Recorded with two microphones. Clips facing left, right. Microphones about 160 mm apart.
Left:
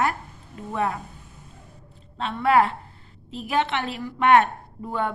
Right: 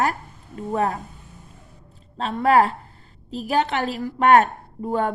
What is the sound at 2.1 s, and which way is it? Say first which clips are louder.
A woman's voice: right 2 dB; 40° right (ahead or behind).